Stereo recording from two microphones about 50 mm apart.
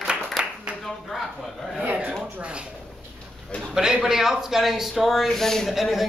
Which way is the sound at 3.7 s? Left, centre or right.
Centre.